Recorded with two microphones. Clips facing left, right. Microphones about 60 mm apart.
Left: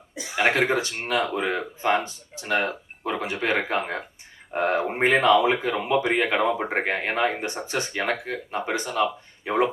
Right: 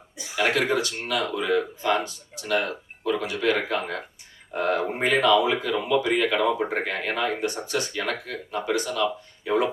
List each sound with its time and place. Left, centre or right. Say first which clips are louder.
0.2 s speech: left 2 dB; left